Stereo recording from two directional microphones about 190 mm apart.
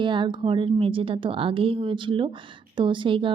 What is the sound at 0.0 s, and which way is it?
Speech, 25° right (ahead or behind).